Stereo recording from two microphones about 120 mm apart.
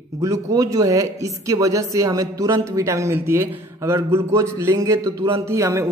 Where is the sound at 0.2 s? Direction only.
30° right (ahead or behind).